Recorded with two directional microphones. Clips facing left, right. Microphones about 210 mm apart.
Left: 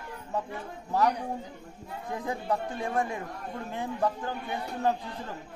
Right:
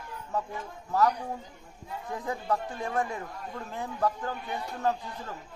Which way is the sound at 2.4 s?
30° left (ahead or behind).